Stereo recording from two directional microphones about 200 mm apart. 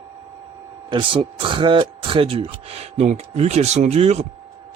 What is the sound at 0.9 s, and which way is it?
A man's voice, 25° right (ahead or behind).